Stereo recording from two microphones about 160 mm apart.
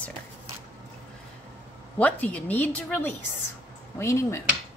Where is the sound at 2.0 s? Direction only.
10° left (ahead or behind).